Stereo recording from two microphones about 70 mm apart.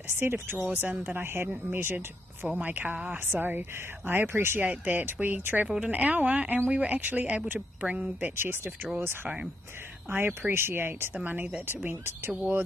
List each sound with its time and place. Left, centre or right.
0.2 s speech: right
8.4 s speech: right